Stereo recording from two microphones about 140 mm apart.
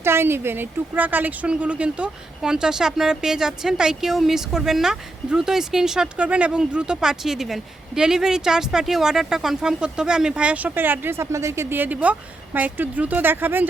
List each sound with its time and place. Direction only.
0.0 s speech: 15° right (ahead or behind)